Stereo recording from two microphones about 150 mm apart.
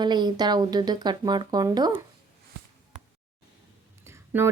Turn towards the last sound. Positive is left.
turn(degrees=-15)  # may be behind; listen again after turning